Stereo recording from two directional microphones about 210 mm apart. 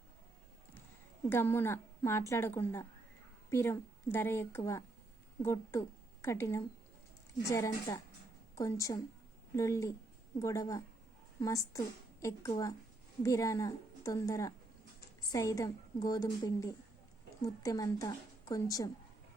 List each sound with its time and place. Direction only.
1.3 s speech: 10° left (ahead or behind)
3.5 s speech: 10° left (ahead or behind)